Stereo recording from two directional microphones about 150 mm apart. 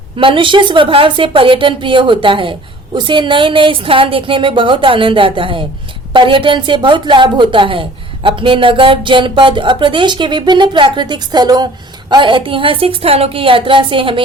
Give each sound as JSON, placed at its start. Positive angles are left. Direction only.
{"t": 0.2, "sound": "speech", "side_deg": -35}